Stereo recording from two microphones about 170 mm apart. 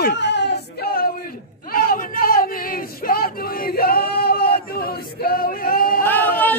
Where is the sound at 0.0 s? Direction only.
90° left; by 5.9 s 60° left (ahead or behind).